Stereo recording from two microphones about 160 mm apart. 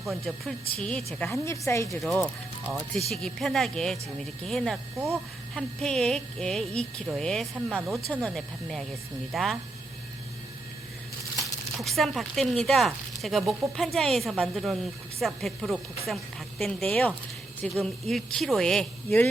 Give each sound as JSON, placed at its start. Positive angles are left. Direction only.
{"t": 0.0, "sound": "speech", "side_deg": 0}
{"t": 1.2, "sound": "a woman's voice", "side_deg": 15}
{"t": 2.0, "sound": "speech", "side_deg": 0}
{"t": 11.8, "sound": "speech", "side_deg": 0}